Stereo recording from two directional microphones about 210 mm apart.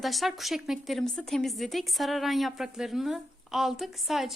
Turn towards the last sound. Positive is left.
turn(degrees=0)  # may be behind; listen again after turning